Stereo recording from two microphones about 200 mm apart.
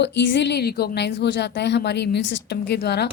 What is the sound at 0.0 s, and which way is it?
A woman's voice, 60° left (ahead or behind).